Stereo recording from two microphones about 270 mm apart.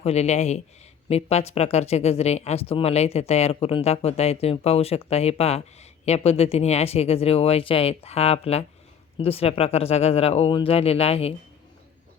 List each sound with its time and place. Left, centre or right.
0.0 s speech: left